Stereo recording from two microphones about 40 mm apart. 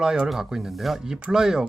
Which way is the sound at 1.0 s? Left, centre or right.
Centre.